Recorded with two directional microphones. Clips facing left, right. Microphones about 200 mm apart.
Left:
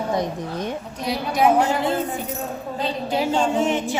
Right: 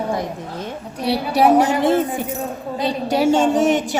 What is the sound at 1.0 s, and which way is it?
Speech, 35° right (ahead or behind).